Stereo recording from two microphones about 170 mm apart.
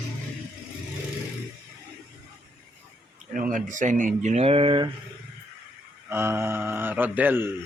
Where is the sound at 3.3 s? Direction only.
55° right (ahead or behind); by 4.9 s 30° right (ahead or behind).